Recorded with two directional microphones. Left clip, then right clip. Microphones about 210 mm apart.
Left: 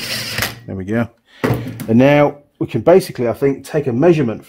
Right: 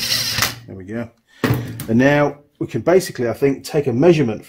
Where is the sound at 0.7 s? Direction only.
60° left (ahead or behind).